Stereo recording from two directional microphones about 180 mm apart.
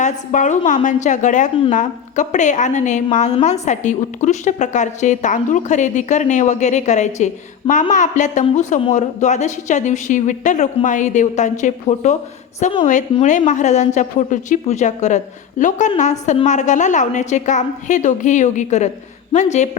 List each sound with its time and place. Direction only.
0.0 s a woman's voice: 40° left (ahead or behind)